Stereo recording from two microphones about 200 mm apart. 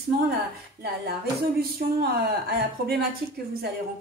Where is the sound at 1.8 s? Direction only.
50° right (ahead or behind).